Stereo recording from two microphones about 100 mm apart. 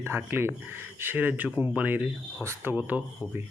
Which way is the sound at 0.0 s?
20° right (ahead or behind).